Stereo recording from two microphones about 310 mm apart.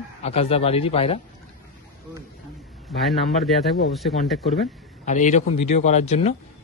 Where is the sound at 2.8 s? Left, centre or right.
Centre.